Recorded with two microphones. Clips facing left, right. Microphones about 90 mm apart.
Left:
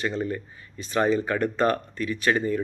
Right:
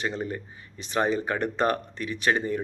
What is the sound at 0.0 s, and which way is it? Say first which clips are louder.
Speech: left 3 dB; 20° right (ahead or behind).